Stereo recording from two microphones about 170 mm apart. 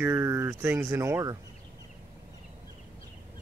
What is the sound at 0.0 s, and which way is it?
Speech, 15° right (ahead or behind).